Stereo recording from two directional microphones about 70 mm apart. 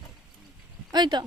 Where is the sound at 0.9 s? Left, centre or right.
Right.